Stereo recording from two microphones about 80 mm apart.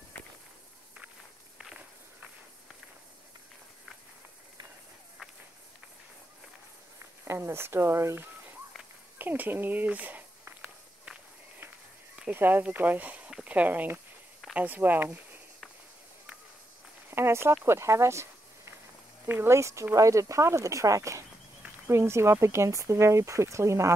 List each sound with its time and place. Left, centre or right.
7.2 s speech: right
9.2 s speech: right
12.3 s speech: right
17.1 s a sound: right
19.2 s speech: right